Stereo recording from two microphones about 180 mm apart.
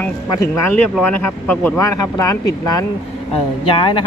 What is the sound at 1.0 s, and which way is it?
Speech, 10° left (ahead or behind).